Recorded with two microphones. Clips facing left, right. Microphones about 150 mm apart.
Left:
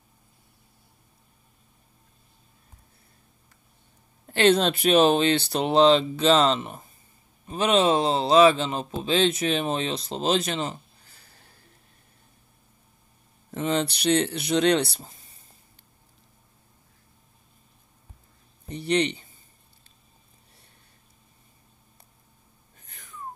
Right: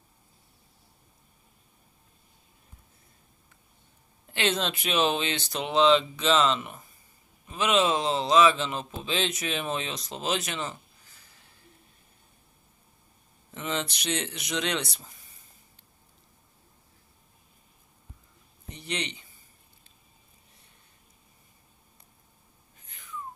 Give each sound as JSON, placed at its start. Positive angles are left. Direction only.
{"t": 4.3, "sound": "speech", "side_deg": 40}
{"t": 13.5, "sound": "speech", "side_deg": 40}
{"t": 18.7, "sound": "speech", "side_deg": 35}
{"t": 22.8, "sound": "a sound", "side_deg": 40}